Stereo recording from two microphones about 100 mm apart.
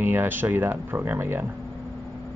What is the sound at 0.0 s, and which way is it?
Speech, 20° right (ahead or behind).